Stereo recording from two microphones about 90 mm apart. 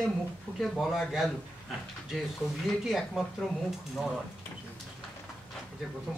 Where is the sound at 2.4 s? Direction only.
30° left (ahead or behind).